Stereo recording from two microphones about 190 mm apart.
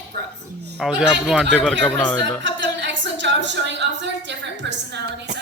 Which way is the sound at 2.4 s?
75° right (ahead or behind).